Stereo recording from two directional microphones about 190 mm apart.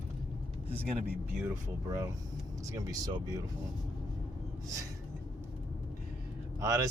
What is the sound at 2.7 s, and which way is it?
Speech, 20° right (ahead or behind).